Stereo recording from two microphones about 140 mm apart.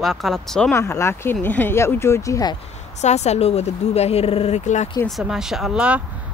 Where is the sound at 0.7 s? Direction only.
20° left (ahead or behind).